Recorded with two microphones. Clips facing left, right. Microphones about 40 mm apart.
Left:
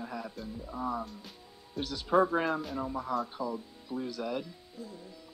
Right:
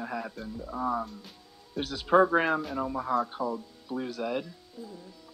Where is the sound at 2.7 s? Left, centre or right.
Right.